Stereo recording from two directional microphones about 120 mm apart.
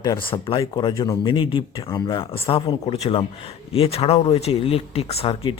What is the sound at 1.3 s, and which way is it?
Speech, 40° left (ahead or behind).